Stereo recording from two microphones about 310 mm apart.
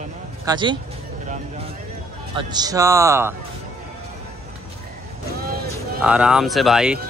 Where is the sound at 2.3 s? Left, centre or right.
Centre.